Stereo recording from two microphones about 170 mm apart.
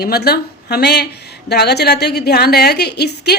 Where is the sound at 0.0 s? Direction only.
70° left (ahead or behind).